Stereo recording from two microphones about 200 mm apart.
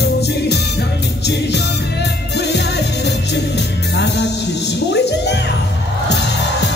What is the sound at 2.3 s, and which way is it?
Music, 55° left (ahead or behind).